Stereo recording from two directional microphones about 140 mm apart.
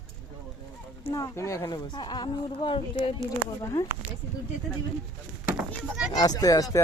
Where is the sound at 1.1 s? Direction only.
20° left (ahead or behind).